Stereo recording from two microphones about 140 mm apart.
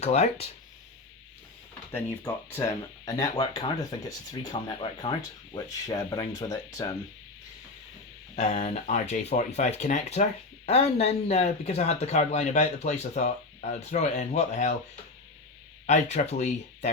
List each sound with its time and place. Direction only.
0.0 s speech: 50° left (ahead or behind)
1.9 s speech: 15° left (ahead or behind)
3.1 s speech: 25° left (ahead or behind)
5.5 s speech: 25° left (ahead or behind)
8.4 s speech: 50° left (ahead or behind)
15.9 s speech: 55° left (ahead or behind)